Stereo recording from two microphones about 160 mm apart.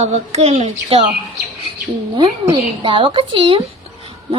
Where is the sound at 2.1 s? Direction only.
30° right (ahead or behind).